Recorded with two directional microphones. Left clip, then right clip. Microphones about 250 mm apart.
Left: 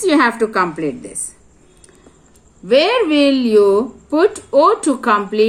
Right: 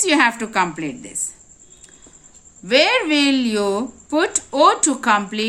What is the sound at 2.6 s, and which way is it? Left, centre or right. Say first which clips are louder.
Speech: left 3 dB; right.